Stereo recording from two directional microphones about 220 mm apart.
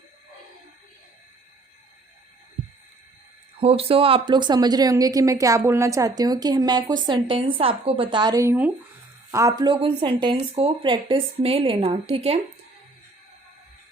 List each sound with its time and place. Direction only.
3.6 s speech: 25° right (ahead or behind)